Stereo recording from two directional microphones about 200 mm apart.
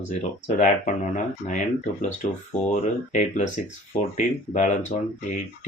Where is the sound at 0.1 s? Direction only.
35° left (ahead or behind).